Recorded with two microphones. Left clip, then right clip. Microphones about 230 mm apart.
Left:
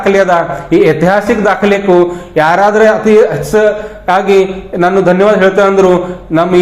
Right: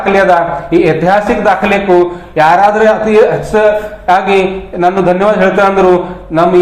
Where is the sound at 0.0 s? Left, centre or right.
Left.